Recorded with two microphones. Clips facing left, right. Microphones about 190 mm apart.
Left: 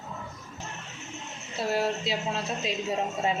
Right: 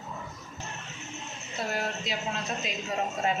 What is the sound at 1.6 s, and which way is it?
Speech, 30° left (ahead or behind).